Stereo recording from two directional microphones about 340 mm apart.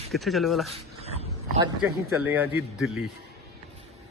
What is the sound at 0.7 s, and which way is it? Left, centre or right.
Dog, centre.